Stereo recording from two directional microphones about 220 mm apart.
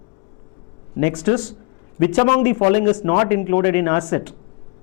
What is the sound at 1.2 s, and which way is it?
Speech, 10° left (ahead or behind).